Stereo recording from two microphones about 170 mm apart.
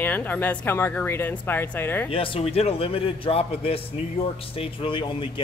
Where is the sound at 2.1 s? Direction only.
30° left (ahead or behind).